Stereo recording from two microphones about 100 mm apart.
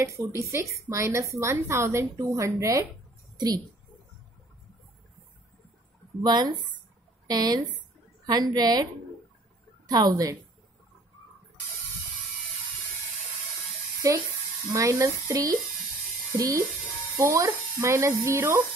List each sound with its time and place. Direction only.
0.0 s a woman's voice: 30° right (ahead or behind)
3.3 s a woman's voice: 45° right (ahead or behind)
6.2 s speech: 45° right (ahead or behind)
9.8 s speech: 45° right (ahead or behind)
14.0 s speech: 35° right (ahead or behind)